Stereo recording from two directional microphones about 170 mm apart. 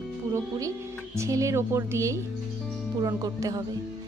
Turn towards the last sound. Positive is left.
turn(degrees=-20)  # may be behind; listen again after turning